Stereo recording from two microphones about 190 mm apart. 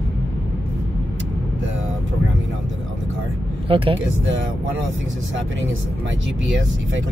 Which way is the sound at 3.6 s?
30° right (ahead or behind).